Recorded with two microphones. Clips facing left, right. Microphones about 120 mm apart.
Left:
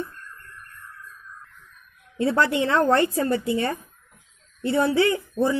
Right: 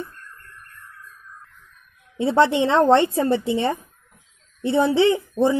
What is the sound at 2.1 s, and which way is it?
A woman's voice, 25° right (ahead or behind).